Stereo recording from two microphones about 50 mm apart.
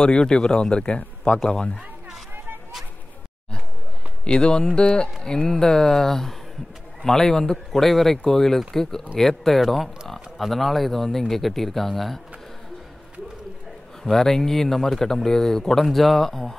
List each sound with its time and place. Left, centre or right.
0.0 s a man's voice: centre
4.2 s speech: centre
14.1 s speech: centre